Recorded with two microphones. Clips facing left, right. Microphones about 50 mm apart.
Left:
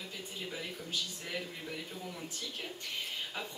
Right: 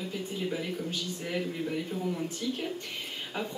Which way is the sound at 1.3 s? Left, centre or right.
Centre.